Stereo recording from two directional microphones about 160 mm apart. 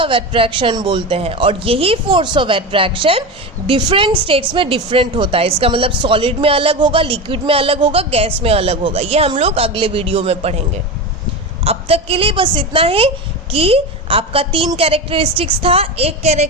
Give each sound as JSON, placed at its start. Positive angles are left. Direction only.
{"t": 0.0, "sound": "a woman's voice", "side_deg": -35}
{"t": 11.6, "sound": "a woman's voice", "side_deg": -40}